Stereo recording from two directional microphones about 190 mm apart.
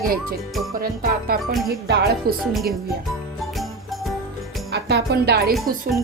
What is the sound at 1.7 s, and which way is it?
Speech, 55° right (ahead or behind).